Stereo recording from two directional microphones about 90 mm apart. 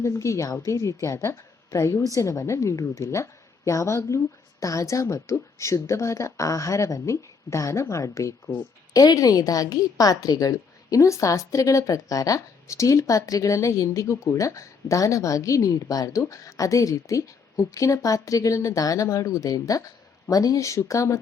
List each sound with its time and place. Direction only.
0.0 s a woman's voice: 35° left (ahead or behind)